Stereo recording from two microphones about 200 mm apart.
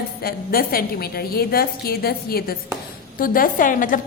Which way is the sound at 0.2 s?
50° left (ahead or behind).